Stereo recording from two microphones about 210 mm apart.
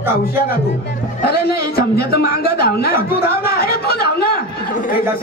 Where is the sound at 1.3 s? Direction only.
45° left (ahead or behind).